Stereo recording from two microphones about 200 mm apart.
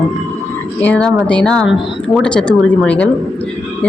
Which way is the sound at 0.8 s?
5° left (ahead or behind).